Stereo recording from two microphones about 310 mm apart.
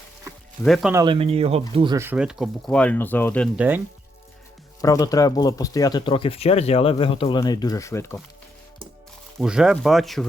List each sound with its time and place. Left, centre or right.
0.6 s speech: centre
1.0 s speech: centre
4.8 s speech: centre
9.4 s speech: centre